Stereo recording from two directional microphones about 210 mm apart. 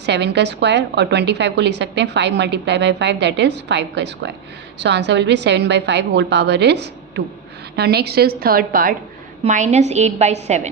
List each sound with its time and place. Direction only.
0.0 s a woman's voice: 55° right (ahead or behind)
9.4 s a woman's voice: 30° right (ahead or behind)